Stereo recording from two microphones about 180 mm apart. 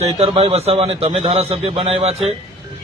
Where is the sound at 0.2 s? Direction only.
35° right (ahead or behind).